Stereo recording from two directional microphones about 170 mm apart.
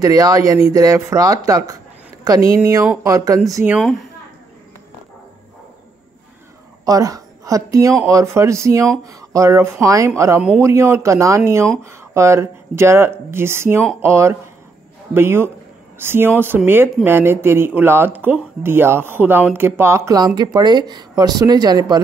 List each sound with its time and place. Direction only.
0.0 s speech: 20° right (ahead or behind)
6.8 s speech: 20° right (ahead or behind)